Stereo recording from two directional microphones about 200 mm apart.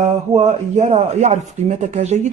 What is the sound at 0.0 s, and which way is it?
Speech, 35° right (ahead or behind).